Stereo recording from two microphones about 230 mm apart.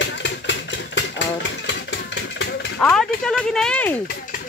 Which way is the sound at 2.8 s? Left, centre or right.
Centre.